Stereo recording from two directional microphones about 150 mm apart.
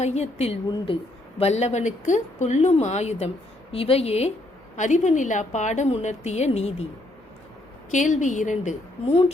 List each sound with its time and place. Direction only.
0.0 s a woman's voice: 45° left (ahead or behind)
7.9 s a woman's voice: 55° left (ahead or behind)